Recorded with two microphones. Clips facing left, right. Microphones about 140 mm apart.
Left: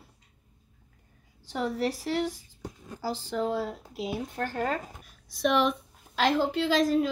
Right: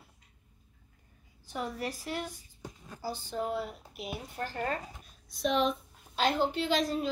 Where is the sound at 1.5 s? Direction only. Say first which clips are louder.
Left 7 dB; 75° left (ahead or behind).